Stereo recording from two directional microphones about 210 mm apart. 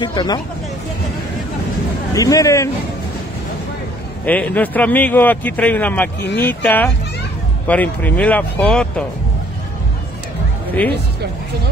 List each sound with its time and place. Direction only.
0.0 s speech: 20° left (ahead or behind)
2.1 s a man's voice: 15° left (ahead or behind)
4.3 s a man's voice: 5° left (ahead or behind)